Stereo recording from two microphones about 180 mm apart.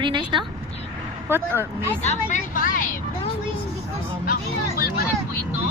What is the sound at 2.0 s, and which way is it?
Speech, 40° left (ahead or behind).